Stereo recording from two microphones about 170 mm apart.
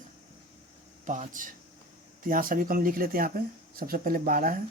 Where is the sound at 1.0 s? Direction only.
50° right (ahead or behind).